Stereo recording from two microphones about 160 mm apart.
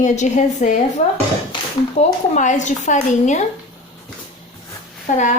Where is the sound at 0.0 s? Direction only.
50° left (ahead or behind).